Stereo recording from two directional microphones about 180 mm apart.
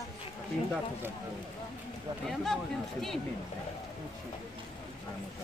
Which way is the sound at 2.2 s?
Centre (ahead or behind).